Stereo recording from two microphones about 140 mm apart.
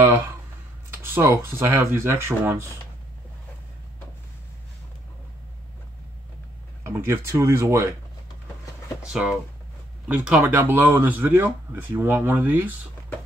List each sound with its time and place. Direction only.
0.8 s speech: 15° right (ahead or behind)
6.8 s speech: 20° right (ahead or behind)
9.0 s speech: 5° right (ahead or behind)